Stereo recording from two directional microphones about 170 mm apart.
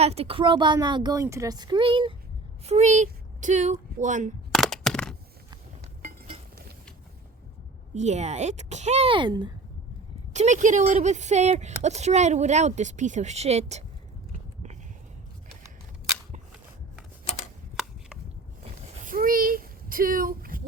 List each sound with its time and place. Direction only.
0.0 s a woman's voice: 35° right (ahead or behind)
2.6 s speech: 40° right (ahead or behind)
4.5 s a sound: centre (ahead or behind)
7.9 s a woman's voice: 40° right (ahead or behind); by 9.5 s 25° right (ahead or behind)
10.3 s speech: 45° right (ahead or behind)
19.0 s a sound: 55° right (ahead or behind)